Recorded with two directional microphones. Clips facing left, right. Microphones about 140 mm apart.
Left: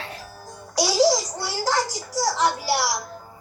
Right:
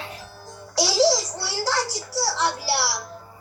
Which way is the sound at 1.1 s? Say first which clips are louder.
Left 1 dB; 45° left (ahead or behind).